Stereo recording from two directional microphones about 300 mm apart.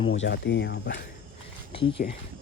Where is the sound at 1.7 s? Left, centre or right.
Centre.